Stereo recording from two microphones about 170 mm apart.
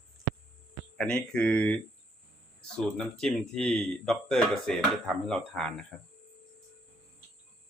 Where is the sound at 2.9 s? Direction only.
5° left (ahead or behind).